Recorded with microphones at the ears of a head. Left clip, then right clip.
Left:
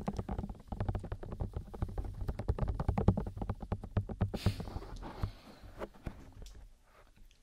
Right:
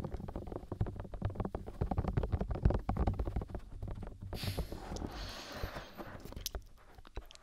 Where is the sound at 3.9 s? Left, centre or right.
Left.